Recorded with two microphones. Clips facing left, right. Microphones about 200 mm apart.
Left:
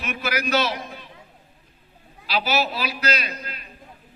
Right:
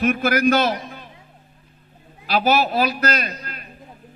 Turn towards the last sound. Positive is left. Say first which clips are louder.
# right 3 dB
turn(degrees=-50)  # may be behind; listen again after turning